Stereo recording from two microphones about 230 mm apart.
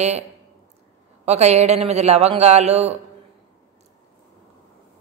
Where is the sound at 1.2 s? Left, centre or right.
Right.